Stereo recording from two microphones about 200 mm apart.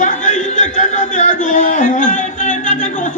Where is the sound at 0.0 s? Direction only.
40° left (ahead or behind).